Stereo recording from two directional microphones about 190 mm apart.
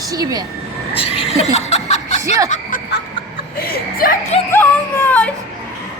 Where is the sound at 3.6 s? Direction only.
50° left (ahead or behind).